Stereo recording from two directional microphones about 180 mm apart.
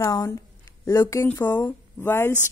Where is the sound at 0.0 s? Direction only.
15° left (ahead or behind).